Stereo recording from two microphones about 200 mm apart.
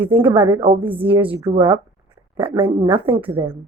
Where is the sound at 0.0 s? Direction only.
10° right (ahead or behind).